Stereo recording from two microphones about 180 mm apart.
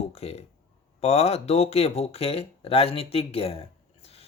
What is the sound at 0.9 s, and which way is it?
Speech, 35° left (ahead or behind).